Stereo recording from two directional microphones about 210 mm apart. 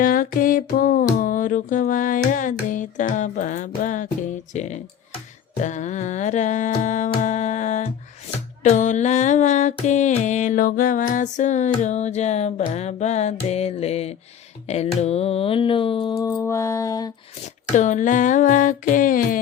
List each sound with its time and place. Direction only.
0.0 s mantra: 40° left (ahead or behind)
14.7 s a sound: 30° left (ahead or behind)
17.7 s mantra: 35° left (ahead or behind)